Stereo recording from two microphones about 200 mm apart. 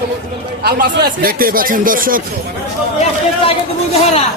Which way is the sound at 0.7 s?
50° right (ahead or behind).